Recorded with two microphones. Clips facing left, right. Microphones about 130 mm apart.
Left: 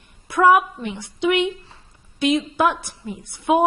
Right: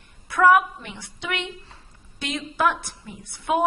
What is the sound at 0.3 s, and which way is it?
A woman's voice, 15° left (ahead or behind).